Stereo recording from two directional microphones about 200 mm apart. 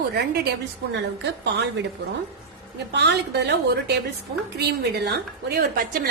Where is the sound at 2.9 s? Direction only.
60° right (ahead or behind).